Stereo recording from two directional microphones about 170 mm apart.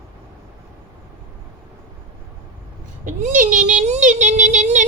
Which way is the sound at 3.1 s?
50° right (ahead or behind).